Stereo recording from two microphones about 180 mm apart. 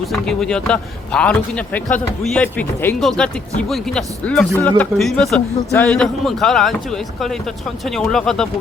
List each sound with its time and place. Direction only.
0.0 s a man's voice: centre (ahead or behind)